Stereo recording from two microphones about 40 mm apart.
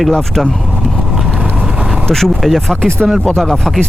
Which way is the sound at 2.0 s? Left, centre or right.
Centre.